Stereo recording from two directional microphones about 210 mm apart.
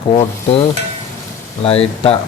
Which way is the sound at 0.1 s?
25° left (ahead or behind).